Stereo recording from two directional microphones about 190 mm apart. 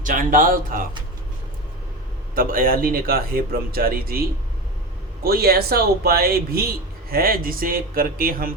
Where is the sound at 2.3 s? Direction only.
50° right (ahead or behind).